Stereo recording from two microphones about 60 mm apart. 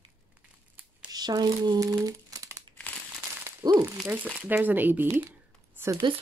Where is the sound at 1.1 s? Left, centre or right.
Right.